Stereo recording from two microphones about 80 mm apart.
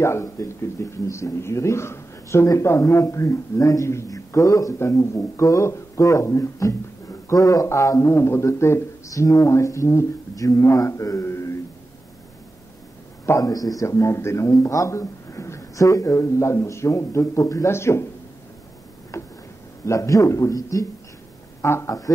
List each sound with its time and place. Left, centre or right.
0.0 s speech: left
13.4 s speech: left
19.1 s a sound: left
19.8 s speech: left